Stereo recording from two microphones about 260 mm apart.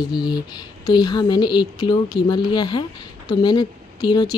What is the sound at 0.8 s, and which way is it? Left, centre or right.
Speech, centre.